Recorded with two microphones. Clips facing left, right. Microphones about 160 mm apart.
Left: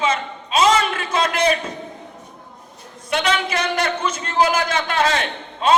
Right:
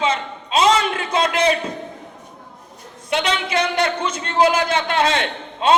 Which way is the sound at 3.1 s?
25° right (ahead or behind).